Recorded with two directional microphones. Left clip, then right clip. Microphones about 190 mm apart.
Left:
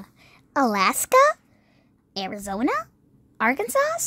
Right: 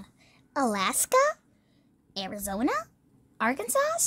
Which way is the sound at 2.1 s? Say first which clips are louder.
Left 4 dB; 15° left (ahead or behind).